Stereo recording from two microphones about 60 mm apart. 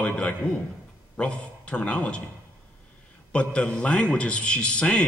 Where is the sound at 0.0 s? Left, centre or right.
Left.